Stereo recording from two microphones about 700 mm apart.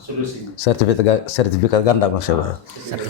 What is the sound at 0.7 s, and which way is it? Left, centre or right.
Speech, left.